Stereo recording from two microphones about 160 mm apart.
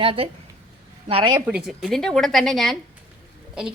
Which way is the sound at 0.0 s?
35° right (ahead or behind).